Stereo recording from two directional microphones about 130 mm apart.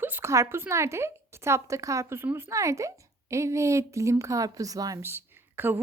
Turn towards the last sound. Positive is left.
turn(degrees=-15)  # may be behind; listen again after turning